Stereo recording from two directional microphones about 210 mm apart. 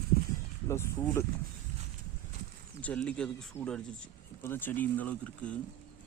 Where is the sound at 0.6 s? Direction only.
10° left (ahead or behind).